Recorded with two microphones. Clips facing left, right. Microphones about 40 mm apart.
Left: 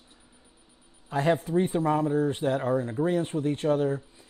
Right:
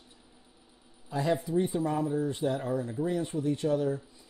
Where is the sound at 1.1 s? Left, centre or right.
Left.